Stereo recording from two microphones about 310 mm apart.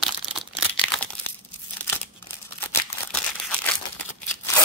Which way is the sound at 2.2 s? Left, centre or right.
Centre.